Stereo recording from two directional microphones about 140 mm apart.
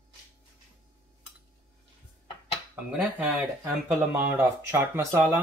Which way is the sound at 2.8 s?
10° right (ahead or behind).